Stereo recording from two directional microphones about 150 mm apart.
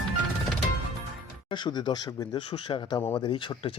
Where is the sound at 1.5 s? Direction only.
30° left (ahead or behind).